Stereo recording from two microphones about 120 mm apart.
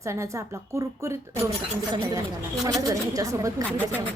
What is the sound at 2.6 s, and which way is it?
A woman's voice, 30° right (ahead or behind).